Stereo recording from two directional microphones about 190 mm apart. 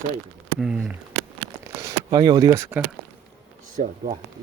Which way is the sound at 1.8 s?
20° right (ahead or behind).